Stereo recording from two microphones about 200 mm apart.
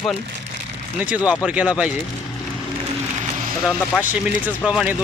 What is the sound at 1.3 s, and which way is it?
Speech, 5° right (ahead or behind).